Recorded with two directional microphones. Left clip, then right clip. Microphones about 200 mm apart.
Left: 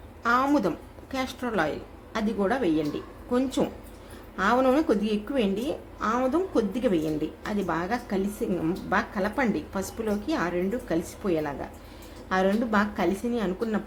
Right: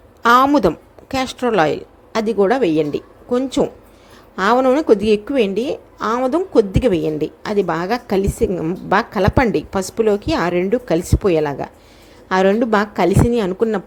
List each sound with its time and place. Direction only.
0.2 s a woman's voice: 40° right (ahead or behind)